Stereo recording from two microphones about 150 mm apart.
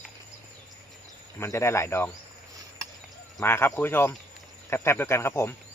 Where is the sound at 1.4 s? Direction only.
15° left (ahead or behind).